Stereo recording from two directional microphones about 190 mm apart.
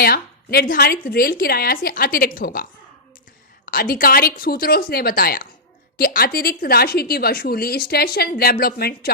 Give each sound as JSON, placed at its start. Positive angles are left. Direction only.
{"t": 0.0, "sound": "a woman's voice", "side_deg": 55}
{"t": 3.7, "sound": "a woman's voice", "side_deg": 50}